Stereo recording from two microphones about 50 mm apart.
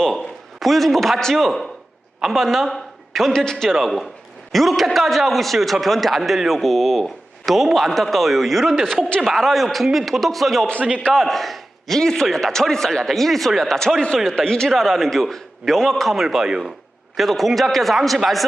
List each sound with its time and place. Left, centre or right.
0.6 s a man's voice: centre
14.7 s a man's voice: centre